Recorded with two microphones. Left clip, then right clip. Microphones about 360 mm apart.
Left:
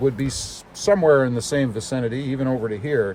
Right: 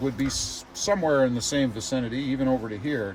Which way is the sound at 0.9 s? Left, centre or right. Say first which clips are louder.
Left 6 dB; left.